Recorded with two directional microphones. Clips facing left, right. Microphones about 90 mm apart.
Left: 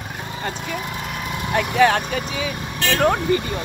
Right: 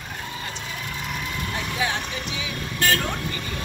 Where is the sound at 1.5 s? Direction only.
70° left (ahead or behind).